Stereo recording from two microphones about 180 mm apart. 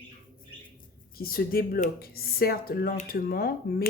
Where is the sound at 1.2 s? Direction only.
55° left (ahead or behind).